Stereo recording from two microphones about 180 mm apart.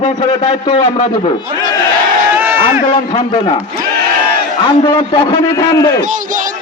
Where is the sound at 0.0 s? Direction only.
30° left (ahead or behind).